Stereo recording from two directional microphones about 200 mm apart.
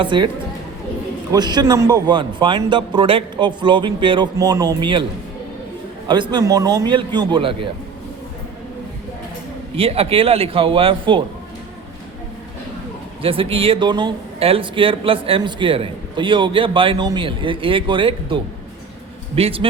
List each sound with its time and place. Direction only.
0.0 s speech: 25° right (ahead or behind)
1.3 s speech: 20° right (ahead or behind)
6.1 s speech: 25° right (ahead or behind)
9.7 s speech: 30° right (ahead or behind)
13.2 s speech: 25° right (ahead or behind)
19.4 s speech: 30° right (ahead or behind)